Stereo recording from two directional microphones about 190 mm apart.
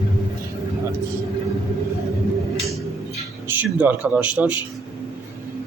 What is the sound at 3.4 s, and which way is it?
Speech, 10° right (ahead or behind).